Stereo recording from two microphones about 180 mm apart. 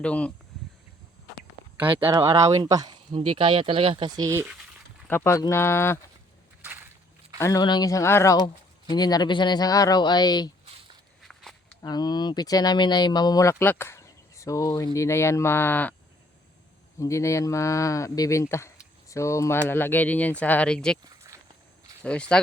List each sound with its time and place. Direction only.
0.0 s speech: 5° left (ahead or behind)
2.0 s speech: 20° right (ahead or behind)
5.0 s speech: 15° left (ahead or behind)
7.3 s speech: 20° left (ahead or behind)
11.2 s walk: centre (ahead or behind)
11.8 s speech: 20° left (ahead or behind)
17.0 s speech: 15° left (ahead or behind)
21.2 s walk: 20° right (ahead or behind)
22.0 s speech: 5° left (ahead or behind)